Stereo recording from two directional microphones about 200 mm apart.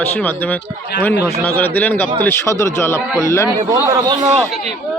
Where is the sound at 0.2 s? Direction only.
10° left (ahead or behind).